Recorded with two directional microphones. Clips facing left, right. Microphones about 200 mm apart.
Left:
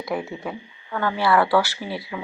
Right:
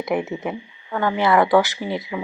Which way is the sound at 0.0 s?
20° right (ahead or behind).